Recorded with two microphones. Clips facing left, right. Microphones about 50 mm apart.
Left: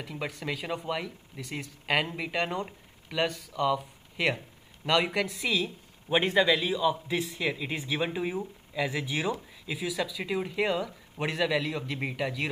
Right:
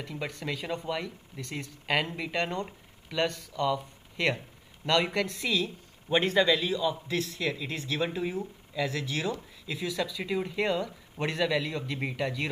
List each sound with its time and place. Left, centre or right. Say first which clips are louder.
0.0 s a man's voice: even; centre